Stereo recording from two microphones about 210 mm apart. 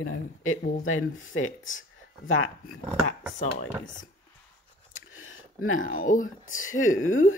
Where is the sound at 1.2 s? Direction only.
70° left (ahead or behind).